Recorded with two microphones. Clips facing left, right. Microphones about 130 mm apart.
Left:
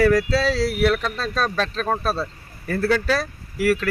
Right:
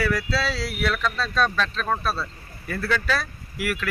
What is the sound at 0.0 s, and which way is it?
Speech, 40° left (ahead or behind).